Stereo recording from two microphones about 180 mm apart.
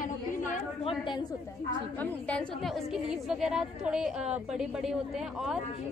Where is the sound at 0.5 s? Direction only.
30° left (ahead or behind).